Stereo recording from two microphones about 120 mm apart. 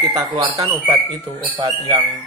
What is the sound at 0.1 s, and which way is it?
Speech, 35° right (ahead or behind).